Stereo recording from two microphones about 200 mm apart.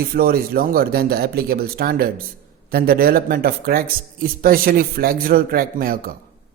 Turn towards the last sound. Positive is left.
turn(degrees=-45)  # may be behind; listen again after turning